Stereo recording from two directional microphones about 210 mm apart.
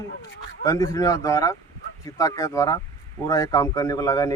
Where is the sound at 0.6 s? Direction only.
15° left (ahead or behind).